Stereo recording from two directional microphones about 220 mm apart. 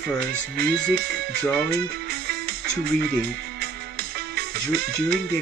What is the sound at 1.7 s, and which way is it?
Music, 45° right (ahead or behind).